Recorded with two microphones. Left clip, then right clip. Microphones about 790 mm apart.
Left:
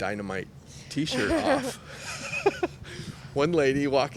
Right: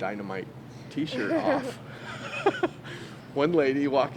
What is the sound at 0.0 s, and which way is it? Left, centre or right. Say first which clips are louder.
Speech: left 1 dB; left.